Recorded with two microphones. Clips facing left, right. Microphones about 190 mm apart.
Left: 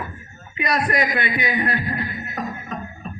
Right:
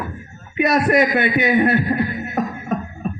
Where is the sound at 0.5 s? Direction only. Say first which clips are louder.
Right 7 dB; 60° right (ahead or behind).